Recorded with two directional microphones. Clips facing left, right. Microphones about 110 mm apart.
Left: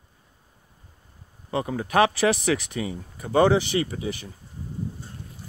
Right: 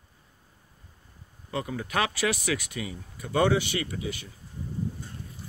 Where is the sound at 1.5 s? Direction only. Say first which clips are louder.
Left 6 dB; 30° left (ahead or behind).